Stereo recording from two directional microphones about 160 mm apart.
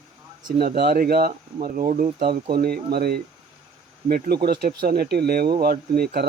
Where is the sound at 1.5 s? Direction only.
55° right (ahead or behind).